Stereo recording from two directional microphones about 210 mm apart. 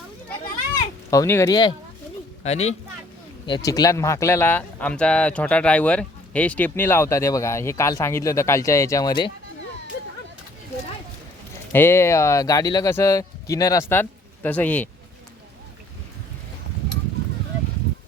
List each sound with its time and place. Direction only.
0.8 s speech: 15° left (ahead or behind)
2.4 s speech: 30° left (ahead or behind)
3.4 s speech: 20° left (ahead or behind)
11.7 s speech: 10° left (ahead or behind)